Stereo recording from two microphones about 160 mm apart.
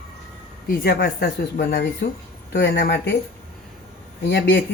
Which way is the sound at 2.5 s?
90° left.